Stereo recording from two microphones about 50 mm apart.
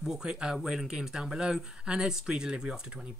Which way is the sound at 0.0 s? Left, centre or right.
Centre.